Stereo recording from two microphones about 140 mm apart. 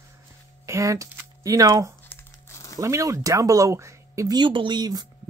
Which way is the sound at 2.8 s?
20° right (ahead or behind).